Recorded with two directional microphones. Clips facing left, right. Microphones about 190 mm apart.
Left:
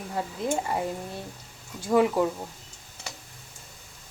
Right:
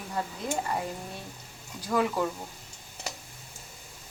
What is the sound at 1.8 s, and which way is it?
Speech, 25° left (ahead or behind).